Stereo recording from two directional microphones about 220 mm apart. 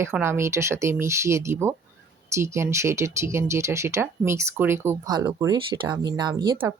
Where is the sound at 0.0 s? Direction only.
10° right (ahead or behind).